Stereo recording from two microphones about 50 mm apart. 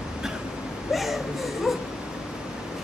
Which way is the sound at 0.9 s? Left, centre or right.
Centre.